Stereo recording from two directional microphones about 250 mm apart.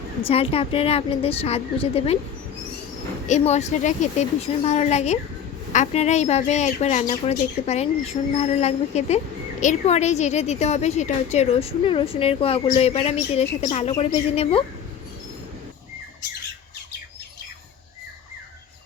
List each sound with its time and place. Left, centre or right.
0.2 s speech: left
3.2 s speech: left